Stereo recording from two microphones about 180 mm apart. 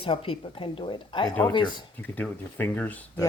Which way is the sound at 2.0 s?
10° left (ahead or behind).